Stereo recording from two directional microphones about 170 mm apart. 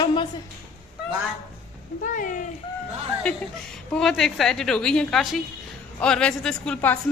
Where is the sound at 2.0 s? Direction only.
50° left (ahead or behind).